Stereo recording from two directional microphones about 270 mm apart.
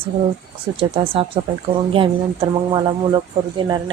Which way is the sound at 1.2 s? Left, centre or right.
Centre.